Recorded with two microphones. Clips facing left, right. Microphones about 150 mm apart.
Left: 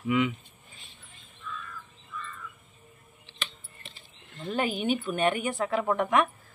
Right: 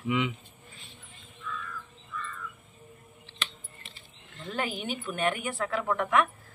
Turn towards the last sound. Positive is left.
turn(degrees=20)  # may be behind; listen again after turning